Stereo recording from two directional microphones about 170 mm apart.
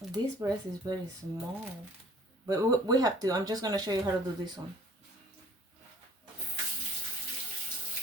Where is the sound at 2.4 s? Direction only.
20° right (ahead or behind).